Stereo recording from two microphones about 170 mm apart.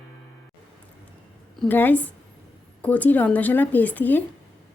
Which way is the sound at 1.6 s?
10° left (ahead or behind).